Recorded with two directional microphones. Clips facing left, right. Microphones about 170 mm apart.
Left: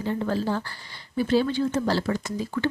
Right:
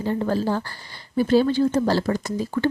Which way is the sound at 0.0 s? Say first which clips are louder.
Right 3 dB; 40° right (ahead or behind).